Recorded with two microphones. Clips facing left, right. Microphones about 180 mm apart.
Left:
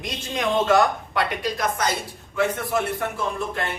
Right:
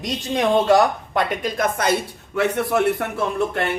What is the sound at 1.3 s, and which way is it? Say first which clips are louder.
Speech: right 3 dB; 50° right (ahead or behind).